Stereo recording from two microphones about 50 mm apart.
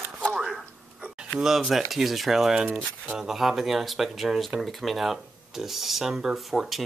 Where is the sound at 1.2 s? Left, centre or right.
Centre.